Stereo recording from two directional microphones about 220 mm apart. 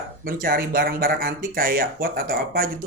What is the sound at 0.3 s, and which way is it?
Speech, 40° right (ahead or behind).